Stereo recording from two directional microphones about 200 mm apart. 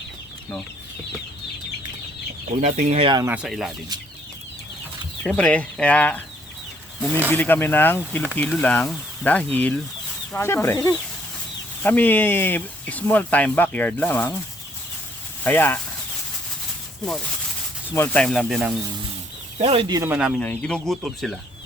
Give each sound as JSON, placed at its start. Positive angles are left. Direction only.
{"t": 2.6, "sound": "speech", "side_deg": -35}
{"t": 3.2, "sound": "speech", "side_deg": -5}
{"t": 5.2, "sound": "speech", "side_deg": 5}
{"t": 7.3, "sound": "speech", "side_deg": 10}
{"t": 15.4, "sound": "speech", "side_deg": 10}
{"t": 17.9, "sound": "speech", "side_deg": 10}
{"t": 19.5, "sound": "speech", "side_deg": -30}
{"t": 20.0, "sound": "speech", "side_deg": -5}